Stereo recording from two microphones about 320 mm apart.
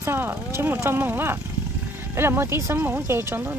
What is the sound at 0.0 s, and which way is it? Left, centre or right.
Speech, centre.